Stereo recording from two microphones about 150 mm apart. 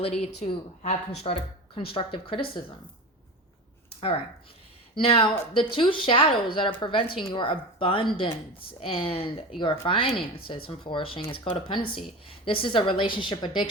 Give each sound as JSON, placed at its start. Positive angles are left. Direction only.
{"t": 0.0, "sound": "speech", "side_deg": 40}
{"t": 4.9, "sound": "speech", "side_deg": 35}